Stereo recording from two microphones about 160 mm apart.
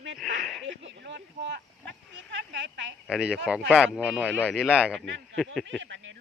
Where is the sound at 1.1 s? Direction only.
90° right.